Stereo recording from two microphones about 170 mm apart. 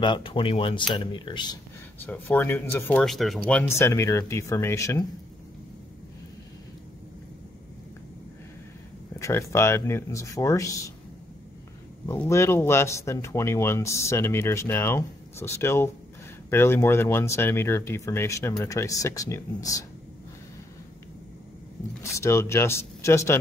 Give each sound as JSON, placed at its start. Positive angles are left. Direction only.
{"t": 0.0, "sound": "speech", "side_deg": 30}
{"t": 2.0, "sound": "speech", "side_deg": 10}
{"t": 3.0, "sound": "speech", "side_deg": 0}
{"t": 9.2, "sound": "speech", "side_deg": 15}
{"t": 12.3, "sound": "speech", "side_deg": 15}
{"t": 22.0, "sound": "speech", "side_deg": 15}